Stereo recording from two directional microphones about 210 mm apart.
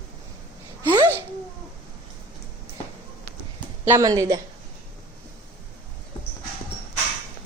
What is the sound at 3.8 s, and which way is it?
Speech, 15° right (ahead or behind).